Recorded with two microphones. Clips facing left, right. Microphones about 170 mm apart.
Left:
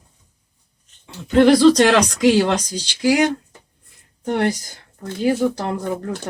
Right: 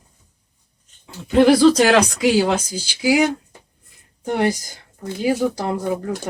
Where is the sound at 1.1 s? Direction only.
5° right (ahead or behind).